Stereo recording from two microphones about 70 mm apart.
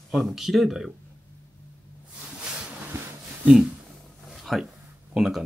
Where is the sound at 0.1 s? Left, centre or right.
Centre.